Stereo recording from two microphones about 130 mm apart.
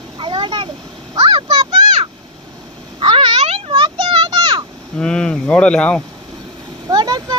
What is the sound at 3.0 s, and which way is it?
Meow, 40° right (ahead or behind).